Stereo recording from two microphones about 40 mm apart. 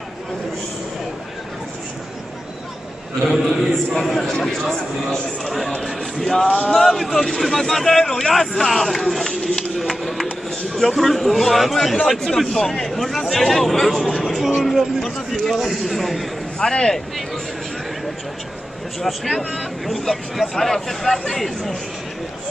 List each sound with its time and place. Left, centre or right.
3.3 s a man's voice: centre
6.7 s a man's voice: centre
16.5 s speech: centre
18.9 s a man's voice: centre